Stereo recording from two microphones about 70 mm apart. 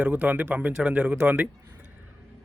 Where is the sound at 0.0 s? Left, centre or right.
Right.